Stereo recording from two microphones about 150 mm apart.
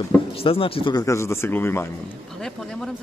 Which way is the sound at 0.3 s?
40° left (ahead or behind).